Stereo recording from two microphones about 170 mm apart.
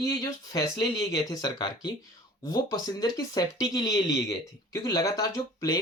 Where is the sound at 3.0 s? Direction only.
25° left (ahead or behind).